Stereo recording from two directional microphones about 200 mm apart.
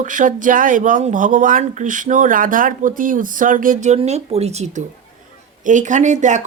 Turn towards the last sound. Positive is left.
turn(degrees=-35)  # may be behind; listen again after turning